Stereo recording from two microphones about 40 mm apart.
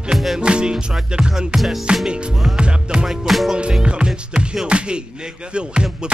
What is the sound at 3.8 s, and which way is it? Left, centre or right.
Music, right.